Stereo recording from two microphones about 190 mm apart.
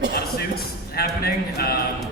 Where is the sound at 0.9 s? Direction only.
55° left (ahead or behind).